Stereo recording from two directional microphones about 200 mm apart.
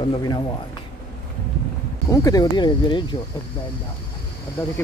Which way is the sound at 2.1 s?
15° left (ahead or behind).